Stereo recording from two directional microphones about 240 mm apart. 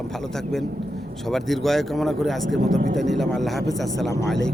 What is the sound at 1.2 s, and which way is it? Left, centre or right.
Speech, centre.